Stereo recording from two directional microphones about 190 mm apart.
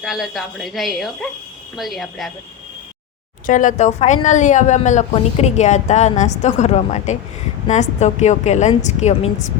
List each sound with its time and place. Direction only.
0.0 s speech: centre (ahead or behind)
3.4 s a woman's voice: 45° left (ahead or behind)